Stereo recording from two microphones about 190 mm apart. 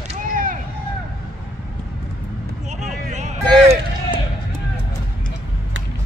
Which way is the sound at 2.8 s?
40° right (ahead or behind).